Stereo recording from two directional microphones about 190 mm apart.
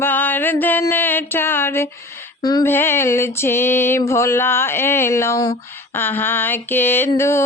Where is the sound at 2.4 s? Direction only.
20° left (ahead or behind).